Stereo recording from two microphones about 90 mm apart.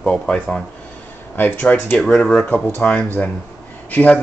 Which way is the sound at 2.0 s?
10° left (ahead or behind).